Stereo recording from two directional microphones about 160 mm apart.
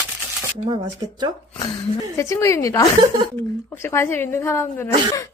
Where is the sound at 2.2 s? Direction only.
20° left (ahead or behind).